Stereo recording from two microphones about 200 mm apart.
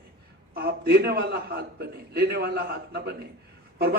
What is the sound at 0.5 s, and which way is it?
A man's voice, 50° right (ahead or behind).